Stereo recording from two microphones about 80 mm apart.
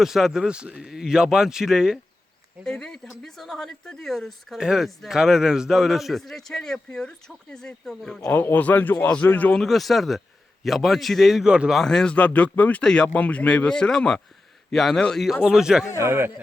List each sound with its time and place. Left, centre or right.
0.0 s speech: centre
2.6 s speech: centre
8.3 s a man's voice: left
9.6 s speech: centre
16.0 s speech: right